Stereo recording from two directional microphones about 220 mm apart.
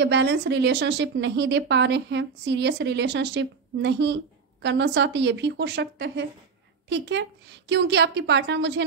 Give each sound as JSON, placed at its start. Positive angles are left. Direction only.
{"t": 0.0, "sound": "speech", "side_deg": -50}